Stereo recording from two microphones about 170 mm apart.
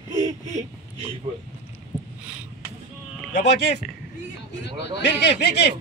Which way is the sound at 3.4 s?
85° left.